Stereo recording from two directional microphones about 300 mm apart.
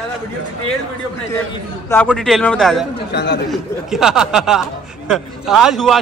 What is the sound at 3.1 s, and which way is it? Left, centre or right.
Speech, left.